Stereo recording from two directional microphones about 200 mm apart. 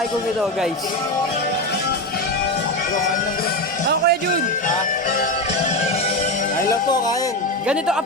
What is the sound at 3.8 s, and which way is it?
Music, 50° right (ahead or behind).